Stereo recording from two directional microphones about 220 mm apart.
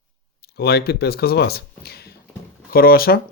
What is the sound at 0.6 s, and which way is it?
Speech, 45° left (ahead or behind).